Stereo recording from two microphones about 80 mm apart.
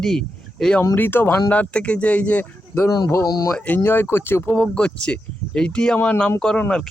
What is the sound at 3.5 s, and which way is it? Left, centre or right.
Speech, centre.